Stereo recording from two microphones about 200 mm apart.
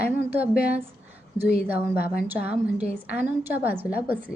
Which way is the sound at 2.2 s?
10° right (ahead or behind).